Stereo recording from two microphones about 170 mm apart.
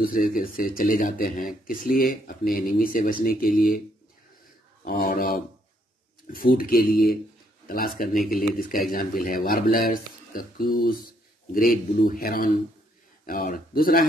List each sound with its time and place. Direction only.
0.0 s speech: 55° left (ahead or behind)
4.8 s speech: 60° left (ahead or behind)